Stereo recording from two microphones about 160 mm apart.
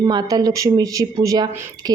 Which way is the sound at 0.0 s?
25° right (ahead or behind).